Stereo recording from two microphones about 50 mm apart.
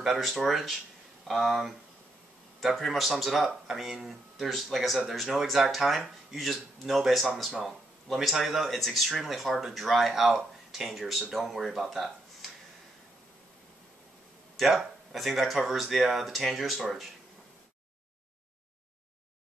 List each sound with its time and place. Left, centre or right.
0.0 s speech: centre
14.6 s speech: centre